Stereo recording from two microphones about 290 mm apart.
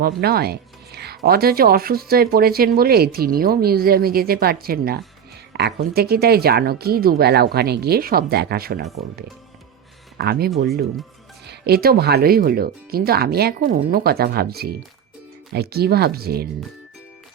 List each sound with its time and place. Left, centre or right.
0.0 s speech: right
10.2 s speech: right